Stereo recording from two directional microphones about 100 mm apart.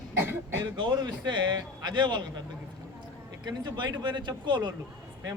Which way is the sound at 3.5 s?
45° right (ahead or behind).